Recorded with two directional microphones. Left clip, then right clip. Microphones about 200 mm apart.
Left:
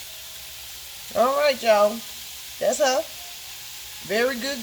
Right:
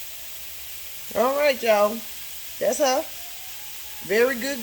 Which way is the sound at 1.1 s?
20° right (ahead or behind).